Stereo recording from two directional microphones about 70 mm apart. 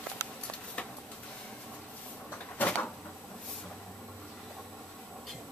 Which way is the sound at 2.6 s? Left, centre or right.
Left.